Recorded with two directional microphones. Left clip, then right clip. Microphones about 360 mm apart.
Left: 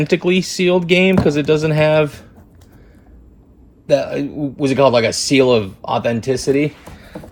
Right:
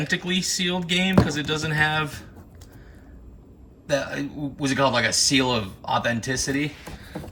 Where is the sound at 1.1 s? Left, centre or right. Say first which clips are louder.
Left 9 dB; centre.